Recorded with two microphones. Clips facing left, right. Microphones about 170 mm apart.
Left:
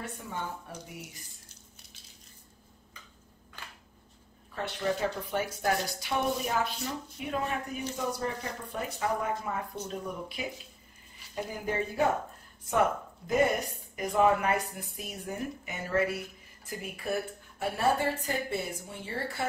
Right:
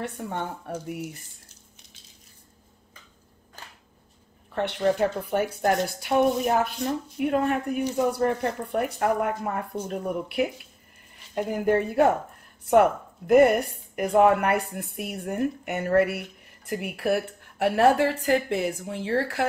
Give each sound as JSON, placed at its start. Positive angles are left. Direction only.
{"t": 0.0, "sound": "a woman's voice", "side_deg": -60}
{"t": 4.6, "sound": "a woman's voice", "side_deg": -65}
{"t": 13.3, "sound": "a woman's voice", "side_deg": -65}